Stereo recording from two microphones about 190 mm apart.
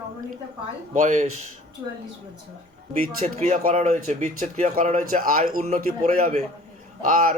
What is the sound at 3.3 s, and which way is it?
Speech, 40° right (ahead or behind).